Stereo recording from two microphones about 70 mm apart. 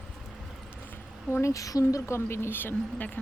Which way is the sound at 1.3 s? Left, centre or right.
Left.